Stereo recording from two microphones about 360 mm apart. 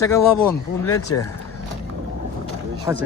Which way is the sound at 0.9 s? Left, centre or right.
Left.